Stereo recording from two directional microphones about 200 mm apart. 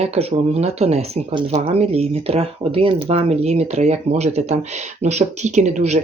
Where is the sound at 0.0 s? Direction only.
30° right (ahead or behind).